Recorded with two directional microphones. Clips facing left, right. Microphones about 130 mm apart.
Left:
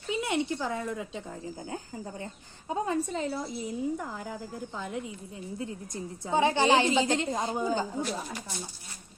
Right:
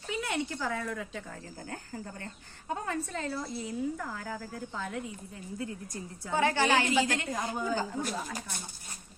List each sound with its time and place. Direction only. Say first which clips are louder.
0.1 s speech: left 4 dB; 20° left (ahead or behind)
8.0 s speech: left 1 dB; 40° right (ahead or behind)